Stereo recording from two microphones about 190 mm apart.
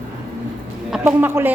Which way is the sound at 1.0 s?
10° right (ahead or behind).